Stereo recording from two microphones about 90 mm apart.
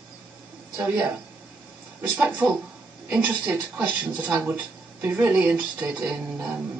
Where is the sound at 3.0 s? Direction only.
15° right (ahead or behind).